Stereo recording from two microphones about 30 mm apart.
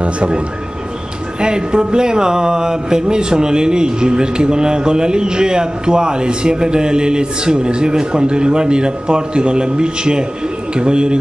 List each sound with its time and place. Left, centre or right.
1.4 s speech: right